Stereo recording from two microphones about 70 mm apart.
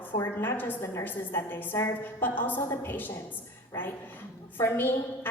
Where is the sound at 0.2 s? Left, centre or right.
Left.